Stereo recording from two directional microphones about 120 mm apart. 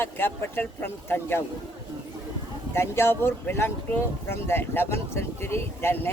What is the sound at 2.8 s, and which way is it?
Speech, 20° left (ahead or behind).